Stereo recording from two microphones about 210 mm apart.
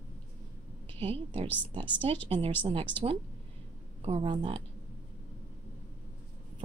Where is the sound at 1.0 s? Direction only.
25° right (ahead or behind).